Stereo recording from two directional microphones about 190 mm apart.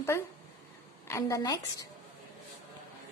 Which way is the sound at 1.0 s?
15° left (ahead or behind).